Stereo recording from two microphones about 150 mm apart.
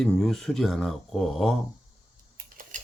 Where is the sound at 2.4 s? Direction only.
60° right (ahead or behind).